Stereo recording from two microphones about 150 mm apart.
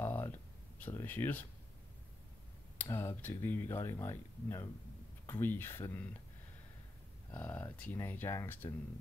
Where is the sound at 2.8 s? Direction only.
15° left (ahead or behind).